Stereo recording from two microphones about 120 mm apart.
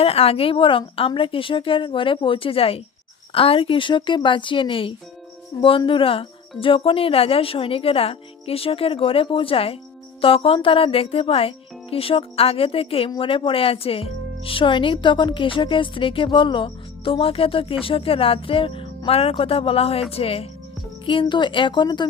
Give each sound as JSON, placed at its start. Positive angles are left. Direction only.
{"t": 0.0, "sound": "a woman's voice", "side_deg": 55}